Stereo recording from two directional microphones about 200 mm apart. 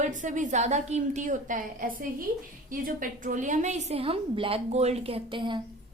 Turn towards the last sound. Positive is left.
turn(degrees=-25)  # may be behind; listen again after turning